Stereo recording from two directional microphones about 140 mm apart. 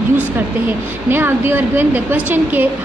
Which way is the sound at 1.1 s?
15° right (ahead or behind).